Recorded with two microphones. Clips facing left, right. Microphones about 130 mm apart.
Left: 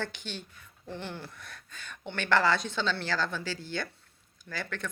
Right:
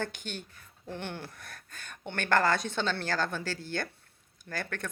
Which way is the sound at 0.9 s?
60° right (ahead or behind).